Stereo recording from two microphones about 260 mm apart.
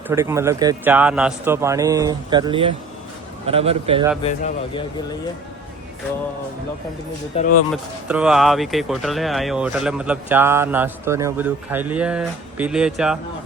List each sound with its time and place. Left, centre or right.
0.1 s a man's voice: centre
4.2 s a man's voice: left
7.3 s a man's voice: left
7.7 s speech: centre